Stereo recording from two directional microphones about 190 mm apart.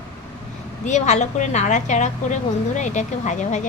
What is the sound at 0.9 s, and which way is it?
A woman's voice, 40° left (ahead or behind).